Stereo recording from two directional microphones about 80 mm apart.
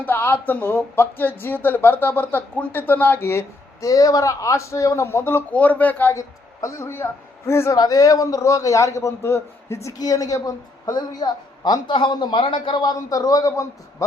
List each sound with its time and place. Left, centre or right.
0.0 s speech: left
5.5 s speech: centre
6.1 s a woman's voice: left
7.8 s a man's voice: left
10.0 s a woman's voice: left
12.9 s a man's voice: left